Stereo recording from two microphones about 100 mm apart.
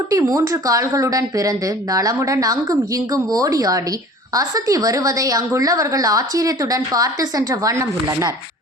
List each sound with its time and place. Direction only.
0.1 s a woman's voice: 35° right (ahead or behind)